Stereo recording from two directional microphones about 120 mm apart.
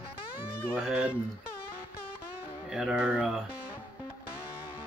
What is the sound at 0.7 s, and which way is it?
Speech, 10° right (ahead or behind).